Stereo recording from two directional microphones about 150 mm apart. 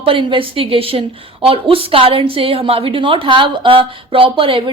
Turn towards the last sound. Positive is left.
turn(degrees=-35)  # may be behind; listen again after turning